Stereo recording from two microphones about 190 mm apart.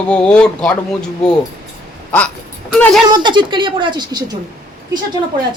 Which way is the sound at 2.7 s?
Centre (ahead or behind).